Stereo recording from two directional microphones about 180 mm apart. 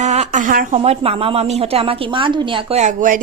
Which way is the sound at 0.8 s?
35° right (ahead or behind).